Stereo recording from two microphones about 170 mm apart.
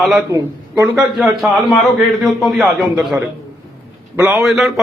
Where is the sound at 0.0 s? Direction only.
Centre (ahead or behind).